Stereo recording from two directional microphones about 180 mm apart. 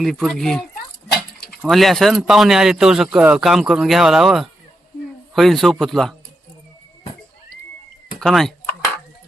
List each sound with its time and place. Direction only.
0.0 s speech: centre (ahead or behind)
1.1 s a sound: 60° left (ahead or behind)
1.6 s speech: centre (ahead or behind)
8.2 s speech: centre (ahead or behind)